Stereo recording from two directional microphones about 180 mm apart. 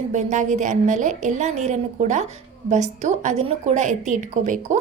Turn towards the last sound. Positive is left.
turn(degrees=-45)  # may be behind; listen again after turning